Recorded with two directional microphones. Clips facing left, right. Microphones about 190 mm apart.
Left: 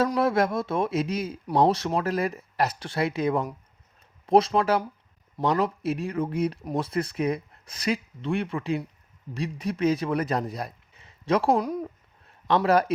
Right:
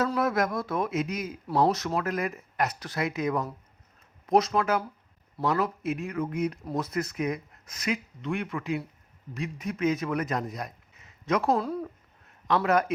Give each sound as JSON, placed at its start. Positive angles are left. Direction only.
{"t": 0.2, "sound": "speech", "side_deg": 30}
{"t": 11.5, "sound": "speech", "side_deg": 15}
{"t": 12.5, "sound": "speech", "side_deg": 35}